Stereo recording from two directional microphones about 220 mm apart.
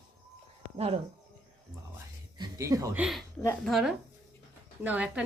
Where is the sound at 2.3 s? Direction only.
15° right (ahead or behind).